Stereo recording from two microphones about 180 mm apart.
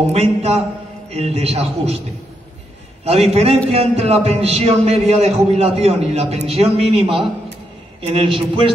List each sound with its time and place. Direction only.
0.0 s a man's voice: 35° right (ahead or behind)
3.1 s a man's voice: 35° right (ahead or behind)